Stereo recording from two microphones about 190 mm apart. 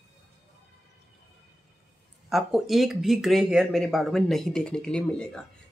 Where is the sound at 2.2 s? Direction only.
Centre (ahead or behind).